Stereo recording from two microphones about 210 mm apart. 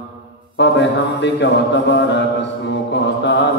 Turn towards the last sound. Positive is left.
turn(degrees=55)  # may be behind; listen again after turning